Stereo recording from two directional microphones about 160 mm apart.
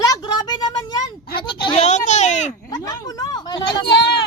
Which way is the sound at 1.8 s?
45° left (ahead or behind).